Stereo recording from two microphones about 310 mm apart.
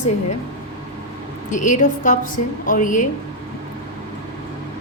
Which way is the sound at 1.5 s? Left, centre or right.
Left.